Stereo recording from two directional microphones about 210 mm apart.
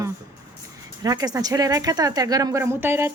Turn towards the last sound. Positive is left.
turn(degrees=-10)  # may be behind; listen again after turning